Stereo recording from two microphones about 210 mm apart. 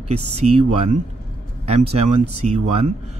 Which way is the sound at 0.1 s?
30° right (ahead or behind).